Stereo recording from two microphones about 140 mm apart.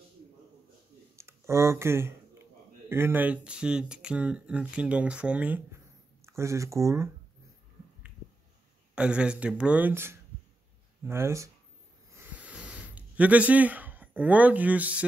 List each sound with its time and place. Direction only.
1.1 s speech: 20° right (ahead or behind)
8.9 s speech: 5° right (ahead or behind)
12.1 s a sound: 15° right (ahead or behind)